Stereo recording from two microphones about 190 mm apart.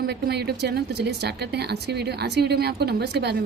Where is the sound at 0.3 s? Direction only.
60° right (ahead or behind).